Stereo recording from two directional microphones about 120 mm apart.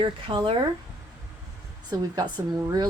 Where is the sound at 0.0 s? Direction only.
45° right (ahead or behind).